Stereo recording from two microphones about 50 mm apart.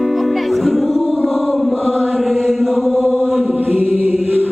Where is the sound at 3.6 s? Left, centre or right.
Right.